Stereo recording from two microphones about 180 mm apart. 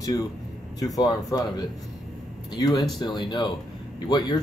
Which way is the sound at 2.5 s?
20° left (ahead or behind).